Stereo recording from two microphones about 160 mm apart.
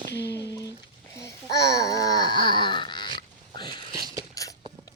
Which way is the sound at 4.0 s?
25° right (ahead or behind).